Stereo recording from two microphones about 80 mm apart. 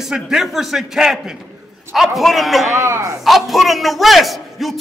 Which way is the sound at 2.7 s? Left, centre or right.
Right.